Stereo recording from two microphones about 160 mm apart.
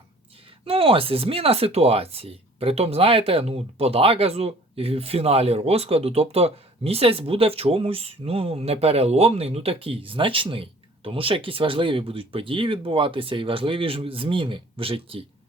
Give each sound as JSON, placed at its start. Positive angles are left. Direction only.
{"t": 0.6, "sound": "speech", "side_deg": -35}